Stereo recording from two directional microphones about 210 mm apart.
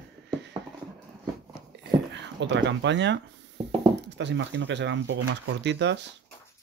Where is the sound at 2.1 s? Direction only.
55° right (ahead or behind).